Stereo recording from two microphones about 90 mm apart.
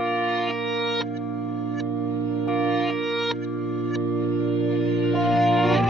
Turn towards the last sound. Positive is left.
turn(degrees=0)  # may be behind; listen again after turning